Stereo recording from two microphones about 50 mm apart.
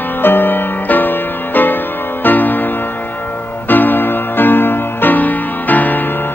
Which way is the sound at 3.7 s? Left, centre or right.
Left.